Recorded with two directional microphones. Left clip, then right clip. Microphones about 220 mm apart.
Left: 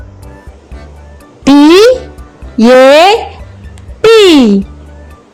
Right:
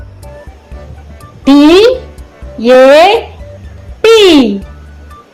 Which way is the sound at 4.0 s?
40° left (ahead or behind).